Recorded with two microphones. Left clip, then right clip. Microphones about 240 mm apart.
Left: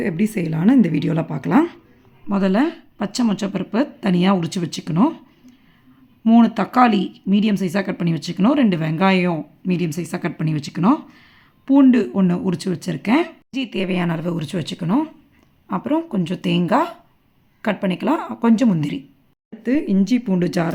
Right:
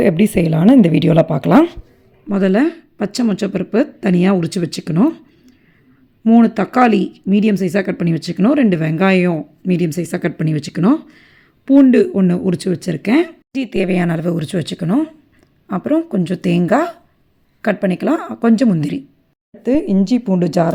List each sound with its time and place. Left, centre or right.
0.0 s speech: right
6.2 s speech: centre